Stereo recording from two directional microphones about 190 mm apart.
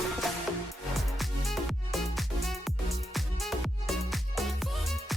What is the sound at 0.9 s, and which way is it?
Music, centre (ahead or behind).